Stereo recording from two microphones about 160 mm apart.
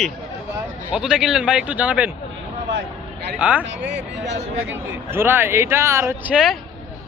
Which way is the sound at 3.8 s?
90° right.